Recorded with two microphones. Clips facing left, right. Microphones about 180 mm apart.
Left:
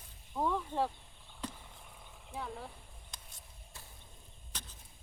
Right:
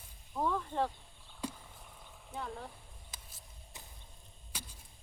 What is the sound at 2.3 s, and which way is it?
Roaring cats, centre (ahead or behind).